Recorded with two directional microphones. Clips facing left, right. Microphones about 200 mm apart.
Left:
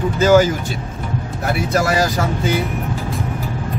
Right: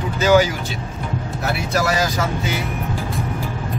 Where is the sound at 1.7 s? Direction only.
50° left (ahead or behind).